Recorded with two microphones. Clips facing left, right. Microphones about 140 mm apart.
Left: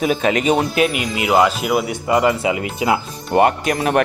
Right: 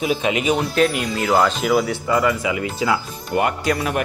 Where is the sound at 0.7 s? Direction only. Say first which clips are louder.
Even; 5° left (ahead or behind).